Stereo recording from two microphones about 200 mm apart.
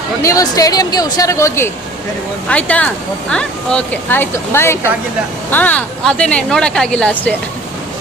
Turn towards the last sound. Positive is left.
turn(degrees=5)  # may be behind; listen again after turning